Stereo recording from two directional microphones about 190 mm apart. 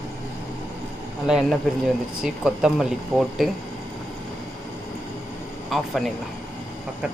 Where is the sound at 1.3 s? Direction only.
Centre (ahead or behind).